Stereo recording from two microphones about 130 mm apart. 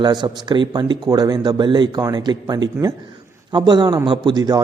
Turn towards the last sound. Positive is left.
turn(degrees=-30)  # may be behind; listen again after turning